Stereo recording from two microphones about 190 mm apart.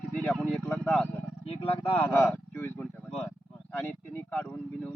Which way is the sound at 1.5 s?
30° left (ahead or behind).